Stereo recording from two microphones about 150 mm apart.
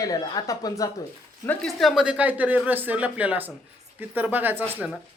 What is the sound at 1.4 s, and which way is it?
Speech, 10° left (ahead or behind).